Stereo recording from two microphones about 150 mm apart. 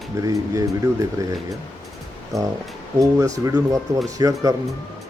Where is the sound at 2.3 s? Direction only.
Centre (ahead or behind).